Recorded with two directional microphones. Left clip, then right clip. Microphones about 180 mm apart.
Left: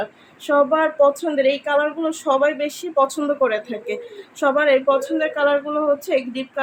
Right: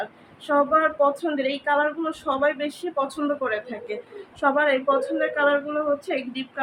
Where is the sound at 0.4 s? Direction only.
65° left (ahead or behind).